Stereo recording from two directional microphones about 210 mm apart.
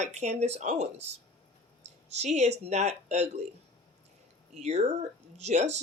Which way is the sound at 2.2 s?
30° right (ahead or behind).